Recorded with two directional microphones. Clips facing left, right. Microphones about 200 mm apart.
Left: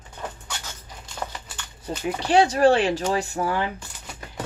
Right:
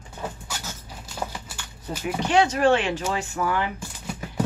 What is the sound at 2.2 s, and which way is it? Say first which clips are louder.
Speech: left 2 dB; 35° left (ahead or behind).